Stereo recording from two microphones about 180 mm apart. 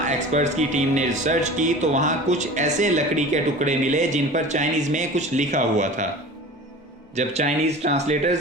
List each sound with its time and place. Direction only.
0.0 s speech: 40° right (ahead or behind)
7.2 s speech: 40° right (ahead or behind)